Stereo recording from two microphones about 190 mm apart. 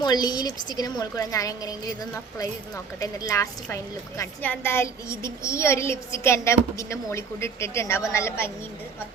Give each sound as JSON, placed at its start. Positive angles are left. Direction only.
{"t": 0.0, "sound": "a woman's voice", "side_deg": 20}